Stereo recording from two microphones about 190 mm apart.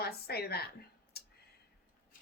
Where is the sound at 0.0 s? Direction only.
55° left (ahead or behind).